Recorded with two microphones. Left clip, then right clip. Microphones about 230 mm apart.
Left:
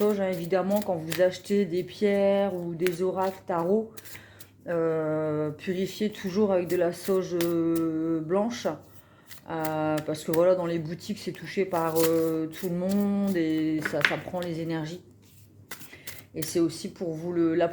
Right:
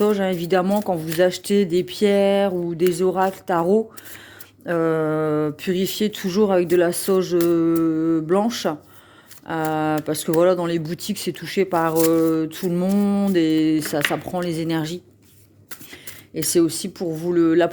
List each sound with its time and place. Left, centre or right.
0.0 s speech: right
16.3 s speech: right